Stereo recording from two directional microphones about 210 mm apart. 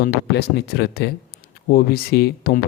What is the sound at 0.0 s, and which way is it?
A man's voice, 50° left (ahead or behind).